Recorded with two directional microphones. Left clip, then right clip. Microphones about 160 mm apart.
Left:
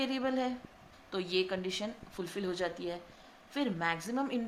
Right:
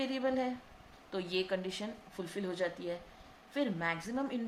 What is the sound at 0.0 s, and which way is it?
A woman's voice, 25° left (ahead or behind).